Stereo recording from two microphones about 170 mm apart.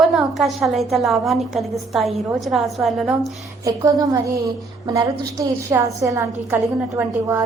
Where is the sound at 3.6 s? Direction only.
20° right (ahead or behind).